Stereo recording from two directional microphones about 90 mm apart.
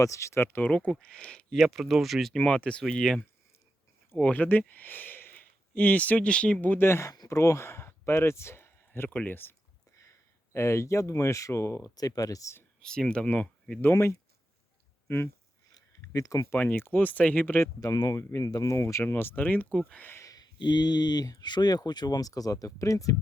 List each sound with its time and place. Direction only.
0.0 s speech: 35° left (ahead or behind); by 2.4 s centre (ahead or behind)
2.4 s speech: 15° left (ahead or behind)
4.2 s speech: 20° left (ahead or behind)
7.1 s speech: 40° left (ahead or behind); by 9.6 s 20° left (ahead or behind)
10.0 s speech: 35° left (ahead or behind)
12.8 s speech: 10° left (ahead or behind)
15.0 s speech: 25° left (ahead or behind)
15.7 s a sound: 45° left (ahead or behind)
16.5 s speech: 25° left (ahead or behind)
17.7 s speech: 40° left (ahead or behind)
19.0 s speech: 25° left (ahead or behind)
20.2 s speech: 45° left (ahead or behind)